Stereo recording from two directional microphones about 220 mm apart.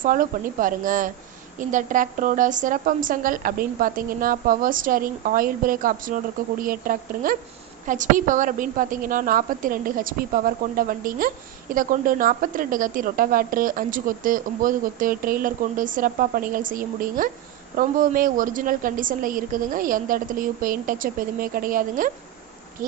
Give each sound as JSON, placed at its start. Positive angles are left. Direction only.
{"t": 0.0, "sound": "speech", "side_deg": -40}